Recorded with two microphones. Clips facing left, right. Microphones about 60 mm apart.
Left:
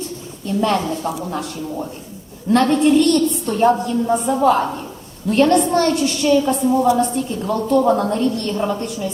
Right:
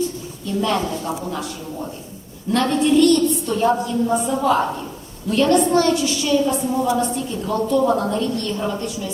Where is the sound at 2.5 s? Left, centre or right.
Left.